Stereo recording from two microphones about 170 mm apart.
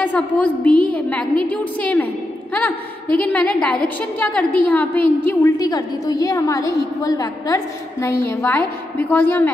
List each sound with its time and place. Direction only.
0.0 s a woman's voice: 10° left (ahead or behind)